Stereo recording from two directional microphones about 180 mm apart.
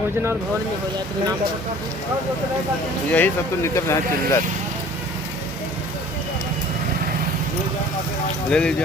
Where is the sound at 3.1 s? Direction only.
15° left (ahead or behind).